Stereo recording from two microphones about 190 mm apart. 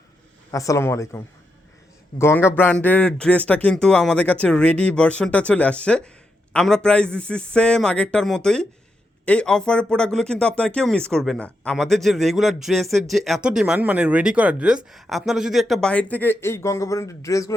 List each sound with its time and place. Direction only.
0.5 s speech: 15° left (ahead or behind)